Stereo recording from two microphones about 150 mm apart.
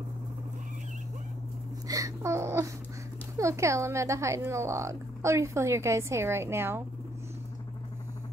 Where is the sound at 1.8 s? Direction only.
20° right (ahead or behind).